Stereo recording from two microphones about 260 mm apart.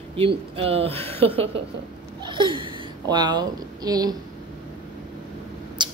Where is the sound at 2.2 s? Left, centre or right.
Centre.